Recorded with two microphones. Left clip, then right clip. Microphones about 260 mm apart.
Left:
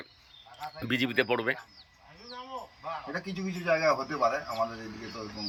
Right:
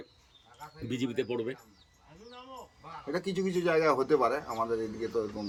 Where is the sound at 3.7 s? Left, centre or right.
Centre.